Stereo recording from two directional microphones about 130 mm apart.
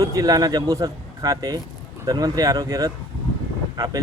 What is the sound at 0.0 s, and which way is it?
Speech, 25° right (ahead or behind).